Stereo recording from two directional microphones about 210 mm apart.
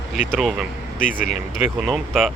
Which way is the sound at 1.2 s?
35° left (ahead or behind).